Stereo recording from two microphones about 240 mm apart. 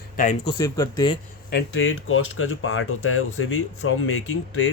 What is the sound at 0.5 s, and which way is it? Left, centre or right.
Speech, centre.